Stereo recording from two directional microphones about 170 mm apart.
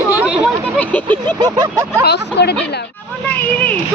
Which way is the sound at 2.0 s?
75° left (ahead or behind).